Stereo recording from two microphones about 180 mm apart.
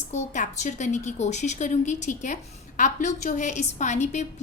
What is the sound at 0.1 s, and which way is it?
A woman's voice, 40° left (ahead or behind).